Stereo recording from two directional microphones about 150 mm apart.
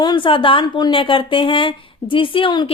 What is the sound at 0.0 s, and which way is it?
Speech, 30° left (ahead or behind).